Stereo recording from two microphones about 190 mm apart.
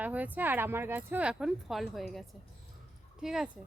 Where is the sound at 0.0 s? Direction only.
10° right (ahead or behind).